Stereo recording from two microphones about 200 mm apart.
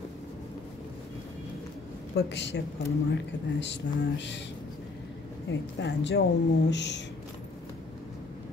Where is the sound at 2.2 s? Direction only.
60° left (ahead or behind).